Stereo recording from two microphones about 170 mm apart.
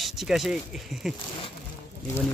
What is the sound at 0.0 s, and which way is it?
Speech, centre (ahead or behind).